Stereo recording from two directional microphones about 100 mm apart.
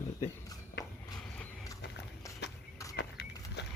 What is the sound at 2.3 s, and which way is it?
Horse, 30° left (ahead or behind).